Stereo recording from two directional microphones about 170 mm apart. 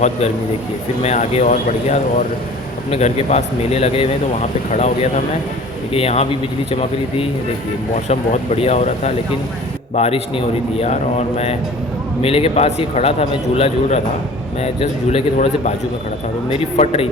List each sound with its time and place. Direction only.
1.0 s a man's voice: 40° left (ahead or behind)